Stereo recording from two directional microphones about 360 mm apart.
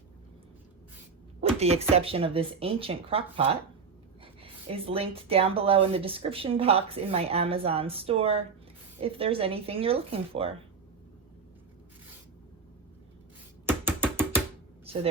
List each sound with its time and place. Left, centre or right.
1.5 s speech: centre
13.7 s music: centre